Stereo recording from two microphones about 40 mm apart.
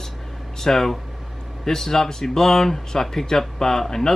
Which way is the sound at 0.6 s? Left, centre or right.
Centre.